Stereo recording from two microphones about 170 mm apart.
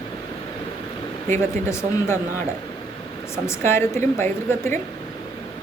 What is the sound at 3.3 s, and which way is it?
Speech, 15° left (ahead or behind).